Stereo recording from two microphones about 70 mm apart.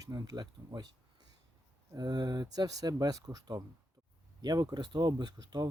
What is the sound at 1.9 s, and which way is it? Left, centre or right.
Speech, right.